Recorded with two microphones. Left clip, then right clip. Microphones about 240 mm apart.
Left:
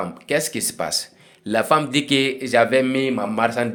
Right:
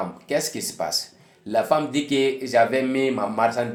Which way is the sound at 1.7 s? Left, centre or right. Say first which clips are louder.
Left 4 dB; left.